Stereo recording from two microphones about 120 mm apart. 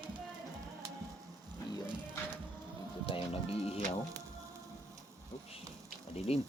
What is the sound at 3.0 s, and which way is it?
Speech, 50° left (ahead or behind).